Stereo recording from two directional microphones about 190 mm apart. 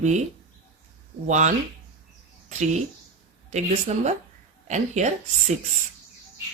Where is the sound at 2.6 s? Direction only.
35° right (ahead or behind).